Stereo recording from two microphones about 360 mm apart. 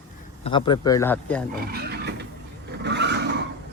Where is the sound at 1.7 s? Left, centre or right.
Right.